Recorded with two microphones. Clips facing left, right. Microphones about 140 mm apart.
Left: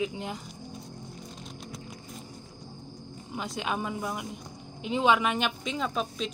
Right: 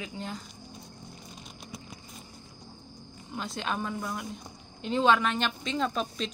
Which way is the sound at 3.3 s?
10° left (ahead or behind).